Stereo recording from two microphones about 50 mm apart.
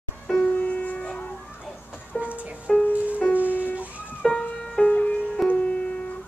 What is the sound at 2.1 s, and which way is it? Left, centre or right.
Music, right.